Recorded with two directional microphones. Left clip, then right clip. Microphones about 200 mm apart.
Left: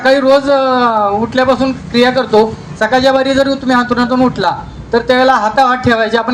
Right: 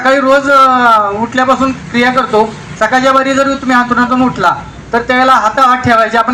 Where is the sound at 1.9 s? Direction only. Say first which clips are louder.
Left 1 dB; 25° left (ahead or behind).